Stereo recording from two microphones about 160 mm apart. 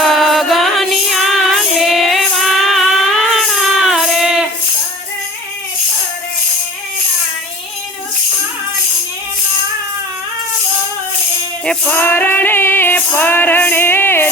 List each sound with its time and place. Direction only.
0.0 s music: centre (ahead or behind)
11.6 s music: 10° left (ahead or behind)